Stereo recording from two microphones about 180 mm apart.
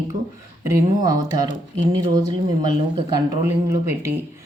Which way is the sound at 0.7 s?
20° right (ahead or behind).